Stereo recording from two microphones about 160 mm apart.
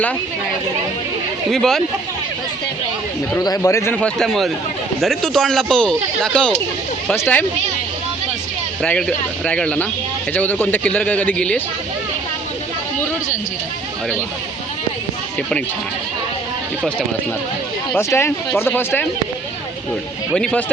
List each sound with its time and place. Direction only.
1.5 s speech: 5° left (ahead or behind)
3.3 s speech: 20° left (ahead or behind)
8.8 s speech: 5° left (ahead or behind)
17.9 s speech: 15° left (ahead or behind)
20.3 s speech: 5° left (ahead or behind)